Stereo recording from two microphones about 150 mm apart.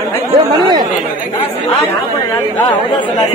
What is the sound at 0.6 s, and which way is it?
Chatter, 30° right (ahead or behind).